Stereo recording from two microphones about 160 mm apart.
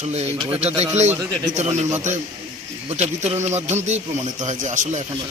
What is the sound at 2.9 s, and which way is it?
Speech, 45° right (ahead or behind).